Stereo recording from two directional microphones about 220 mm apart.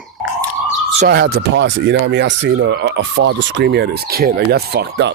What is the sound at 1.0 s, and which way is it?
Speech, 45° right (ahead or behind).